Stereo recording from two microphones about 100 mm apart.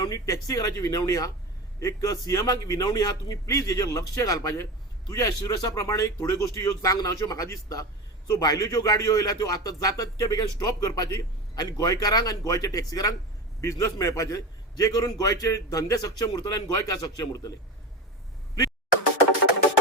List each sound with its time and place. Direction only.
0.0 s a man's voice: 35° left (ahead or behind)